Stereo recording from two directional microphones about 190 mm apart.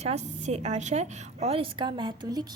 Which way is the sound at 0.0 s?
35° right (ahead or behind).